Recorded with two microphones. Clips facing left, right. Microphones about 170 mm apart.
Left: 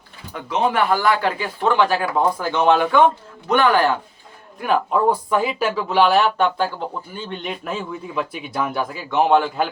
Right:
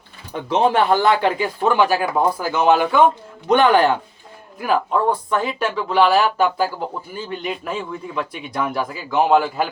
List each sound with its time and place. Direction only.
0.3 s speech: 30° right (ahead or behind); by 3.0 s 5° right (ahead or behind)
3.5 s speech: 20° right (ahead or behind)
4.6 s speech: centre (ahead or behind)